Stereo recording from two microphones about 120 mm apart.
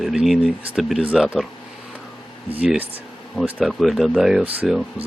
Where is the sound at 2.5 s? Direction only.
10° right (ahead or behind).